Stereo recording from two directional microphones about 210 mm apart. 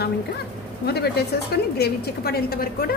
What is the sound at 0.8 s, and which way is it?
A woman's voice, 50° left (ahead or behind).